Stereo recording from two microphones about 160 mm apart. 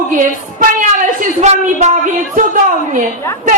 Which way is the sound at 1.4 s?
45° right (ahead or behind).